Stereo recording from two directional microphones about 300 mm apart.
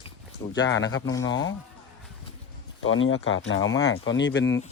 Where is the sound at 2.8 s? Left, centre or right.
Left.